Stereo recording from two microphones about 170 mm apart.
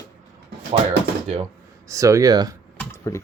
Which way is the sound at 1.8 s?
20° right (ahead or behind).